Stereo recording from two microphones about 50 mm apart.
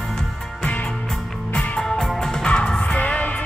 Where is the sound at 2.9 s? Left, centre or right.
Left.